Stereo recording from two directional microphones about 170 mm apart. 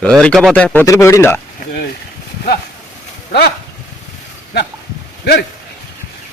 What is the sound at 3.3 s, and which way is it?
Speech, 65° left (ahead or behind).